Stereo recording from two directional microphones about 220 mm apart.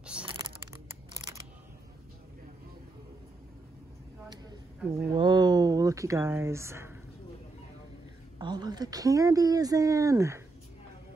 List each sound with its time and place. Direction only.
0.2 s a sound: 25° right (ahead or behind)
5.1 s speech: 20° right (ahead or behind)
8.4 s speech: 20° right (ahead or behind)